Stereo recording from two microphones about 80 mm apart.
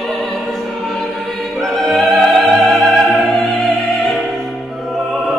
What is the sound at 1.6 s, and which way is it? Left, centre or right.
Opera, centre.